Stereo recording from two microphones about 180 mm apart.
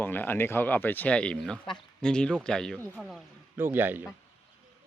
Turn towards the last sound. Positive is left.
turn(degrees=-10)  # may be behind; listen again after turning